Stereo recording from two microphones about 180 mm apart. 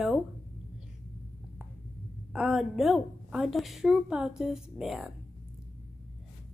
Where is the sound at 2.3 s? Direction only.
5° right (ahead or behind).